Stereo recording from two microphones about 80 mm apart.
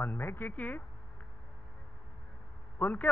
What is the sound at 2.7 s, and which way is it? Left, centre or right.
Speech, left.